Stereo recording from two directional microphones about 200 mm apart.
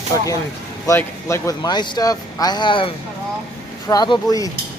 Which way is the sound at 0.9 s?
15° left (ahead or behind).